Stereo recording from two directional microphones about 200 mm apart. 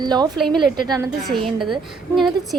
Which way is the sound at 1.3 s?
Centre (ahead or behind).